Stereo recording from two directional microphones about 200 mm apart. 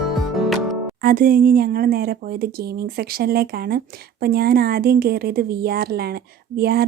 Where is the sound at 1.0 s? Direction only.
45° right (ahead or behind).